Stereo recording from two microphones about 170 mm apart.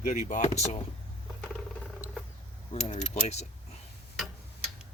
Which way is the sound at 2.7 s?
40° left (ahead or behind).